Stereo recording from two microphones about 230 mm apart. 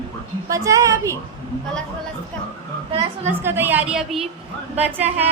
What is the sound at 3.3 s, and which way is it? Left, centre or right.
A woman's voice, centre.